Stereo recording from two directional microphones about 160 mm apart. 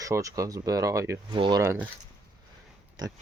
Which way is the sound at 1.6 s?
15° right (ahead or behind).